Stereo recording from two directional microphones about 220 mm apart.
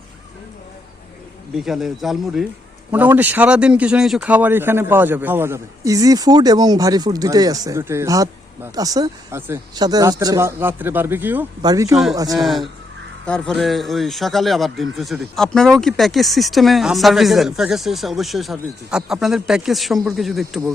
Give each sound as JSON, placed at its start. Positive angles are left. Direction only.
{"t": 1.5, "sound": "a man's voice", "side_deg": 0}
{"t": 12.4, "sound": "a man's voice", "side_deg": 0}